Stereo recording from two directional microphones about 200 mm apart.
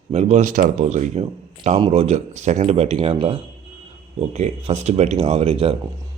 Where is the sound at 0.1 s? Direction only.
35° right (ahead or behind).